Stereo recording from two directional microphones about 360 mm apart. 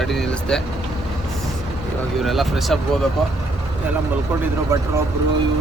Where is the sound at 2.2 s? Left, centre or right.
Centre.